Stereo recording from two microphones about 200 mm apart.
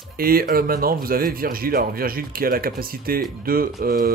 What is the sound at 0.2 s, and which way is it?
Speech, 45° right (ahead or behind).